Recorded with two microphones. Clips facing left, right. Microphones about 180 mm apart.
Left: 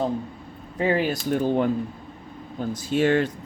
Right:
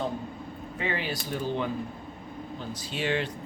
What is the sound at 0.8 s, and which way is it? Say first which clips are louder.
Speech: left 9 dB; 40° left (ahead or behind).